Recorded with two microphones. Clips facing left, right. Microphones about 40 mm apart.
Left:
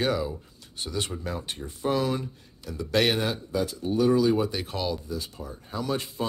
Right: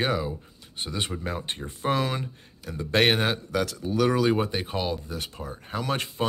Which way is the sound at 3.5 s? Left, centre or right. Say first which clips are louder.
Even; right.